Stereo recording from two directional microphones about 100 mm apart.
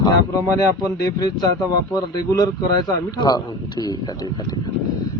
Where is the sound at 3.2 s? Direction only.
40° left (ahead or behind).